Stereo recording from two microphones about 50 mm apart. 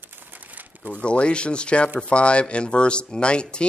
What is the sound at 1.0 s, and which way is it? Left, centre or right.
Speech, left.